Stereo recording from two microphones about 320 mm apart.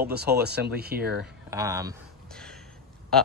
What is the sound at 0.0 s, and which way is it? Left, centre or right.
Speech, right.